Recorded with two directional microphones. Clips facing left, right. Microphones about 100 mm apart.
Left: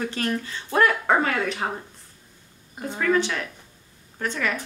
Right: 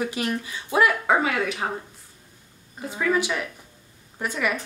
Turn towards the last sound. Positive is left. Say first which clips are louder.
# right 1 dB
turn(degrees=-10)  # may be behind; listen again after turning